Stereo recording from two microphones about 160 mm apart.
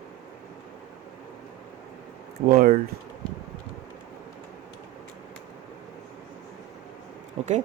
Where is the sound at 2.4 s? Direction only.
60° right (ahead or behind).